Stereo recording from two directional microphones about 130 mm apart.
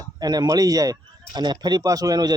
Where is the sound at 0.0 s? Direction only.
30° right (ahead or behind).